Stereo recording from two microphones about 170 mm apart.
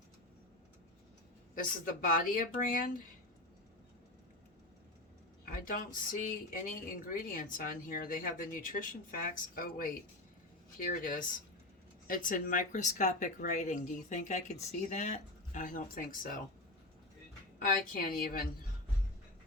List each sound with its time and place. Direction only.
1.5 s speech: 55° left (ahead or behind)
5.5 s speech: 55° left (ahead or behind)
17.6 s speech: 55° left (ahead or behind)